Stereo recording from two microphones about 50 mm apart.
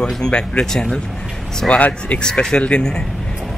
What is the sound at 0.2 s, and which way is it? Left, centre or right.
Speech, centre.